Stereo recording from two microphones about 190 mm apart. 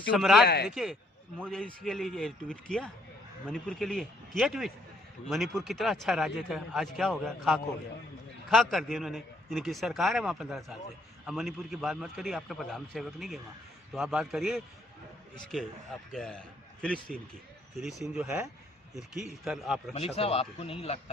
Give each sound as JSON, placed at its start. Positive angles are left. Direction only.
{"t": 0.1, "sound": "a man's voice", "side_deg": 0}
{"t": 0.4, "sound": "a man's voice", "side_deg": 60}
{"t": 0.7, "sound": "a man's voice", "side_deg": 0}
{"t": 19.9, "sound": "speech", "side_deg": 30}